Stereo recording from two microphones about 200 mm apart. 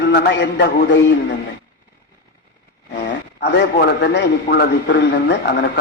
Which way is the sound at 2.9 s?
60° left (ahead or behind).